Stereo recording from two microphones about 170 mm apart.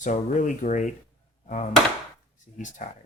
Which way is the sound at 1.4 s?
45° left (ahead or behind).